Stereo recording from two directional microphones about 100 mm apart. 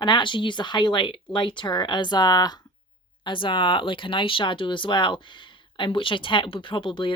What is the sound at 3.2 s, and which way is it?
Speech, 55° left (ahead or behind).